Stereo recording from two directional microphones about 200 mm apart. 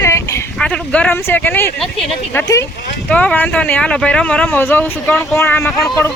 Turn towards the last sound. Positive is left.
turn(degrees=5)  # may be behind; listen again after turning